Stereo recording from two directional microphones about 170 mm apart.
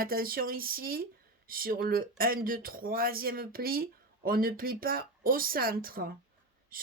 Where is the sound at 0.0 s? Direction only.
60° right (ahead or behind).